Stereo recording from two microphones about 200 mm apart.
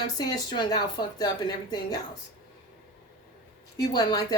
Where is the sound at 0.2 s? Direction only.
20° left (ahead or behind).